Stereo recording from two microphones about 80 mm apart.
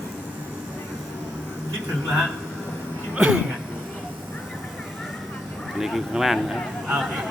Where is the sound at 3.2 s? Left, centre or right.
Centre.